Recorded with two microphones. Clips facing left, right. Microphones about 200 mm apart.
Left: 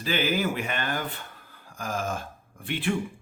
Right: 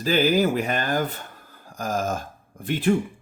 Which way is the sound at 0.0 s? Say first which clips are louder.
Right 6 dB; 40° right (ahead or behind).